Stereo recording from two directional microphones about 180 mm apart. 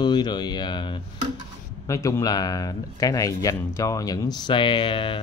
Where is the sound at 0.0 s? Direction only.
25° left (ahead or behind).